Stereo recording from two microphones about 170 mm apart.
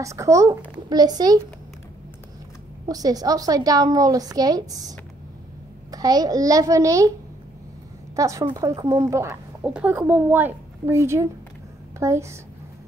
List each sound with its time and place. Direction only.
0.0 s a woman's voice: 15° right (ahead or behind)
2.9 s a woman's voice: 20° right (ahead or behind)
8.2 s a woman's voice: 20° right (ahead or behind)